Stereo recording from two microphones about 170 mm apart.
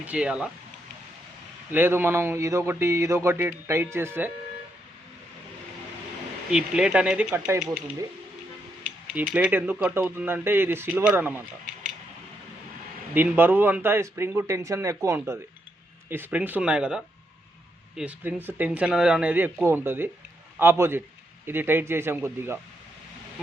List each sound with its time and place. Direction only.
0.0 s speech: 5° right (ahead or behind)
1.7 s speech: 10° right (ahead or behind)
6.5 s speech: 5° right (ahead or behind)
9.0 s speech: 10° right (ahead or behind)
13.1 s speech: 10° right (ahead or behind)